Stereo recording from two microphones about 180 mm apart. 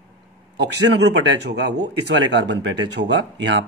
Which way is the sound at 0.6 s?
70° right (ahead or behind).